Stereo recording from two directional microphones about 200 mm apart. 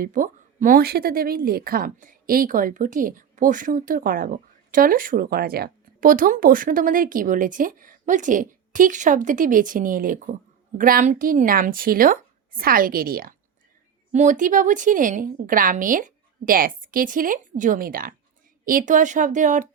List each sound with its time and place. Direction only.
0.0 s a woman's voice: 40° right (ahead or behind)